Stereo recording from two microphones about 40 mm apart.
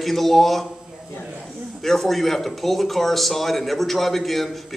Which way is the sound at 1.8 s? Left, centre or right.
Centre.